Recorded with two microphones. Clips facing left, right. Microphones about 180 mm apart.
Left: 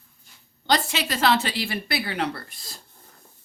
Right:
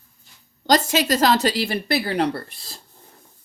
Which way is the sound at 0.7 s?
45° right (ahead or behind).